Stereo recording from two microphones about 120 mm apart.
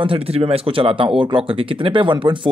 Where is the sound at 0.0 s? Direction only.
50° right (ahead or behind).